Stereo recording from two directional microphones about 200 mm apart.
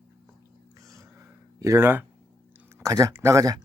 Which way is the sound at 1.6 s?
15° right (ahead or behind).